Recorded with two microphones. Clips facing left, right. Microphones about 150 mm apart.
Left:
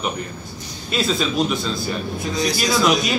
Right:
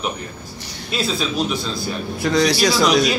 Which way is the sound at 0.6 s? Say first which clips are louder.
Right 1 dB; 70° right (ahead or behind).